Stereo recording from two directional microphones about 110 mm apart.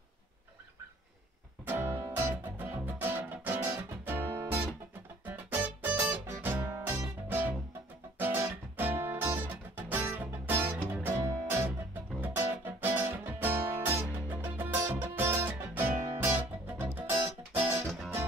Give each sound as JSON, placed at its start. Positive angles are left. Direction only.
{"t": 1.7, "sound": "music", "side_deg": -20}
{"t": 4.3, "sound": "music", "side_deg": -30}
{"t": 5.3, "sound": "music", "side_deg": -15}